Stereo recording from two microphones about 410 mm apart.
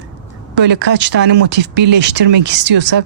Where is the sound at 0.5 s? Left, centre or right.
Right.